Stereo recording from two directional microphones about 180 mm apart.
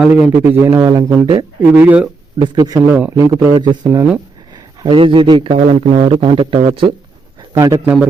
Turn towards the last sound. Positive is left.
turn(degrees=-15)  # may be behind; listen again after turning